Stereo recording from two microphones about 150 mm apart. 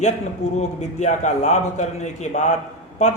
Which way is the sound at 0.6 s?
50° left (ahead or behind).